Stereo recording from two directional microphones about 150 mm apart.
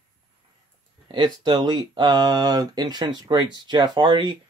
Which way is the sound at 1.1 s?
30° right (ahead or behind).